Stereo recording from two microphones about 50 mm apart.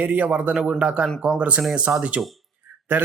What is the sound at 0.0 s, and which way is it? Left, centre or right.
Speech, right.